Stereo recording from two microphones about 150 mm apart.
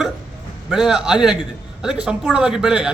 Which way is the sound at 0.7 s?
5° right (ahead or behind).